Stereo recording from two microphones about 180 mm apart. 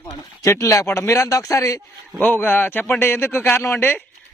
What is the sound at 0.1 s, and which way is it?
A child's voice, 15° left (ahead or behind).